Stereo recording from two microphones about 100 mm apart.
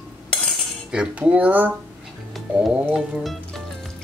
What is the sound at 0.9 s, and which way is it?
Music, 10° right (ahead or behind).